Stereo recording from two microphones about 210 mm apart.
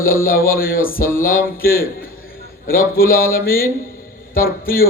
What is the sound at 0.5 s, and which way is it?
A man's voice, 45° left (ahead or behind).